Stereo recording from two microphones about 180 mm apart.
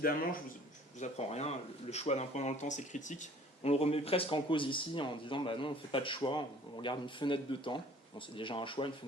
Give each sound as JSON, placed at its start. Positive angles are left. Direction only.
{"t": 0.0, "sound": "speech", "side_deg": 55}
{"t": 0.9, "sound": "speech", "side_deg": 40}